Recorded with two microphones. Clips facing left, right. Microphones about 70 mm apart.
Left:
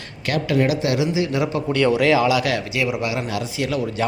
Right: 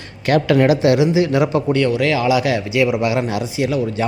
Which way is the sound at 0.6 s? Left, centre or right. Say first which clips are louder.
Right 6 dB; right.